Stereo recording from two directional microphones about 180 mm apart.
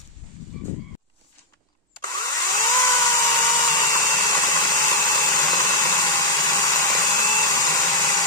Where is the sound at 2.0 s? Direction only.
20° left (ahead or behind).